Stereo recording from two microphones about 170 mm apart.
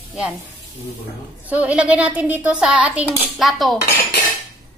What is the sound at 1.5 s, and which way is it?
Speech, 5° right (ahead or behind).